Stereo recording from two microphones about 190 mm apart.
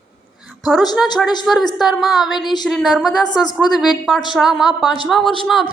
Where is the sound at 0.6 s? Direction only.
Centre (ahead or behind).